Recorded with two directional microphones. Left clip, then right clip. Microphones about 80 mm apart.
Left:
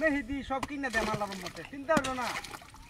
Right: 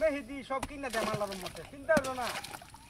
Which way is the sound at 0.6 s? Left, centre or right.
Centre.